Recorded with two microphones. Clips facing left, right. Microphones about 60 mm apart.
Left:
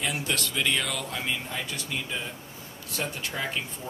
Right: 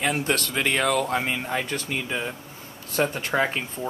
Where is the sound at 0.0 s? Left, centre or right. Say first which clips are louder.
Right 5 dB; right.